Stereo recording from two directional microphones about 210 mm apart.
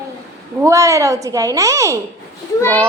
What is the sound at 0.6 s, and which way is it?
A woman's voice, 15° right (ahead or behind).